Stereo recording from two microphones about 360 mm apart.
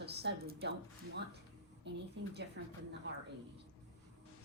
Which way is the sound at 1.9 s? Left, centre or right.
Right.